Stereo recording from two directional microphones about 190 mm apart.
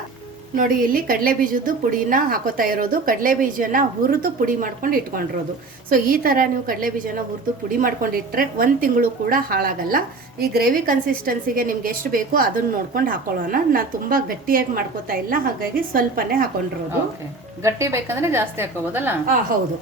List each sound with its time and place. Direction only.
0.5 s a woman's voice: 50° right (ahead or behind)
17.6 s a woman's voice: 15° right (ahead or behind)